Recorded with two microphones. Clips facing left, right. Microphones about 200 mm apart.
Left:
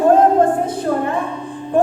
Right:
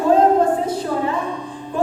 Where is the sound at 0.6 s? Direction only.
55° left (ahead or behind).